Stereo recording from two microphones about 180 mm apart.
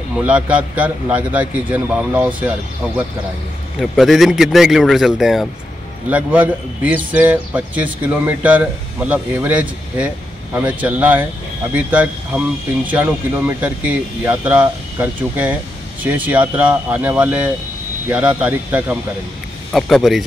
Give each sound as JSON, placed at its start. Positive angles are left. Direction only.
{"t": 0.2, "sound": "a man's voice", "side_deg": -5}
{"t": 3.8, "sound": "a man's voice", "side_deg": 0}